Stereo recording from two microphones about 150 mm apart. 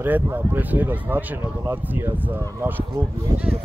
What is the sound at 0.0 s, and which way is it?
Speech, 15° right (ahead or behind).